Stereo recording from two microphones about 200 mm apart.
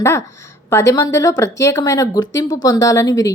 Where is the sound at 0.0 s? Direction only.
15° left (ahead or behind).